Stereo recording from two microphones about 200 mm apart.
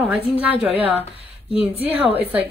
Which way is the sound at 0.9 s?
30° left (ahead or behind).